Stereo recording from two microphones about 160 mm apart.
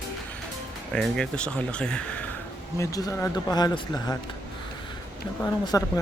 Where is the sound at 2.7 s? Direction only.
20° left (ahead or behind).